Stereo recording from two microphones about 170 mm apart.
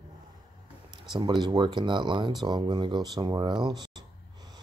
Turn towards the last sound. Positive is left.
turn(degrees=-25)  # may be behind; listen again after turning